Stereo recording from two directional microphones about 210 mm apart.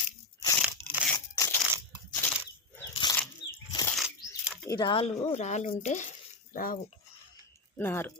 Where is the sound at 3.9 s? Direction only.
5° right (ahead or behind).